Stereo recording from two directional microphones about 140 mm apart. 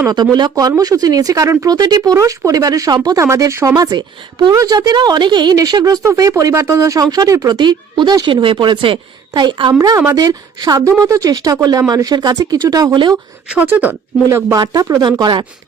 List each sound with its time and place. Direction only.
0.1 s speech: 30° right (ahead or behind)
13.5 s speech: 10° right (ahead or behind)
14.3 s speech: 25° right (ahead or behind)